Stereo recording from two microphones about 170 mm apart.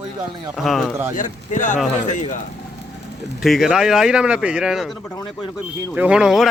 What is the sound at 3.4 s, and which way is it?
Speech, centre (ahead or behind).